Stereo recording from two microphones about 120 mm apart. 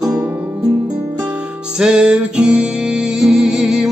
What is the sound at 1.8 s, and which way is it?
Music, 5° right (ahead or behind).